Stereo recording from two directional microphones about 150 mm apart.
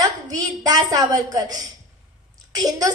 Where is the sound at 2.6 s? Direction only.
25° right (ahead or behind).